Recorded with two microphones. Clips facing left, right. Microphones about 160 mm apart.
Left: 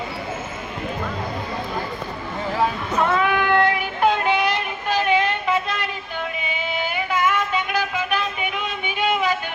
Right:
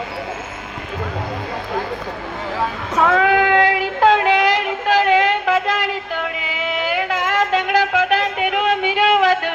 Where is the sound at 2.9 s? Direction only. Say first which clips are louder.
Right 6 dB; 90° right.